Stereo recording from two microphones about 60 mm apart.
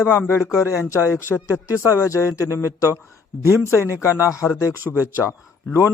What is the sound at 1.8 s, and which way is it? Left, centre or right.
Speech, left.